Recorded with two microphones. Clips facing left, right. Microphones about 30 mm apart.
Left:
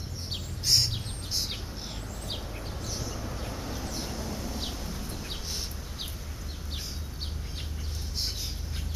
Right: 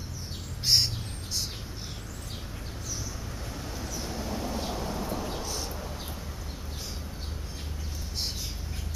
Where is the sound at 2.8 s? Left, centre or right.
Left.